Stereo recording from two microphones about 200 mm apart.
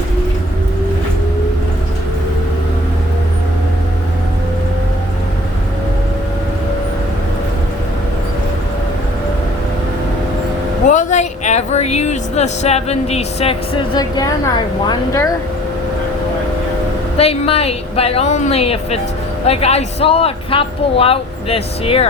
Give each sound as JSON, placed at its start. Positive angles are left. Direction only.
{"t": 10.8, "sound": "speech", "side_deg": 40}
{"t": 17.2, "sound": "a woman's voice", "side_deg": 30}